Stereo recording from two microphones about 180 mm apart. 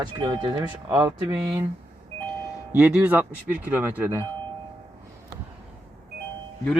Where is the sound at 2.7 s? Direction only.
10° right (ahead or behind).